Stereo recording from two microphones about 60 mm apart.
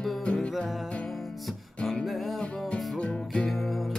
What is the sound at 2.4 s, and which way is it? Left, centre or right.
Music, centre.